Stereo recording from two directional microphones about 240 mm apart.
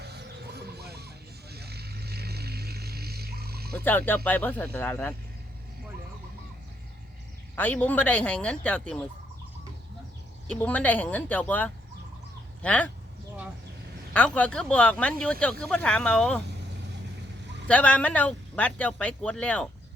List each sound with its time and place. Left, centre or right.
0.0 s music: right
3.8 s speech: centre
7.5 s speech: centre
10.5 s speech: centre
14.1 s speech: centre
17.7 s speech: centre